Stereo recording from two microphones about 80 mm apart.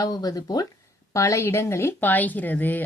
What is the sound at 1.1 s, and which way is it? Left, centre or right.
Speech, left.